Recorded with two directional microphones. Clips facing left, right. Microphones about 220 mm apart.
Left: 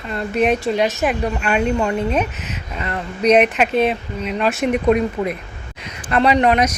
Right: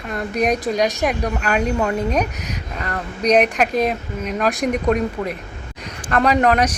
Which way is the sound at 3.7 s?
40° right (ahead or behind).